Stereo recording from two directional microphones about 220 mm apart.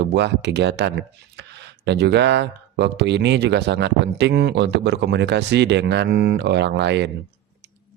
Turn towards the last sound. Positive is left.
turn(degrees=-50)  # may be behind; listen again after turning